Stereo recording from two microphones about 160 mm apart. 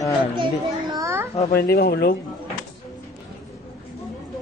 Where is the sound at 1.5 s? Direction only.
75° left (ahead or behind).